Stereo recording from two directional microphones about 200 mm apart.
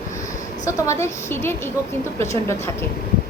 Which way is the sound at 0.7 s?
15° left (ahead or behind).